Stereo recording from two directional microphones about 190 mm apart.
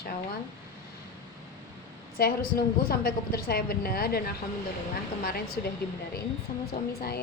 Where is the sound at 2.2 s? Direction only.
50° left (ahead or behind).